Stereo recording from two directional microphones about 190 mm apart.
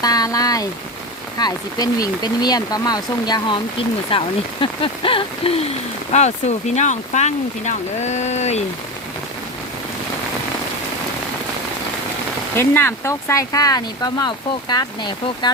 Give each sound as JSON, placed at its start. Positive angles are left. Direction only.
{"t": 0.0, "sound": "speech", "side_deg": 20}
{"t": 12.5, "sound": "speech", "side_deg": 10}